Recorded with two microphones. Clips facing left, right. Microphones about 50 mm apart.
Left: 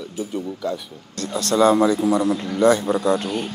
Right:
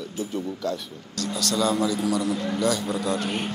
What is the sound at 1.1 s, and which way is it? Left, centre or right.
A man's voice, left.